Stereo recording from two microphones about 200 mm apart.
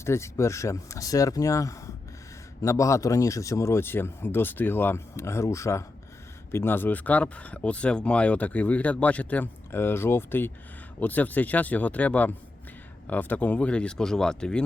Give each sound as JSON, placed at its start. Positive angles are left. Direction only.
{"t": 0.0, "sound": "speech", "side_deg": 15}